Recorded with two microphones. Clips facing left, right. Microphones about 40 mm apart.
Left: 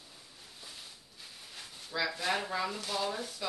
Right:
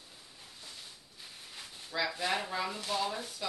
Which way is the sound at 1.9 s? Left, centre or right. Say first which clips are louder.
Even; centre.